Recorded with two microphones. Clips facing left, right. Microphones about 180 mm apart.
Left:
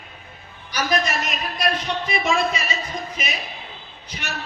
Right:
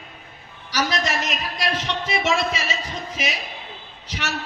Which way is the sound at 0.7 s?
75° right (ahead or behind).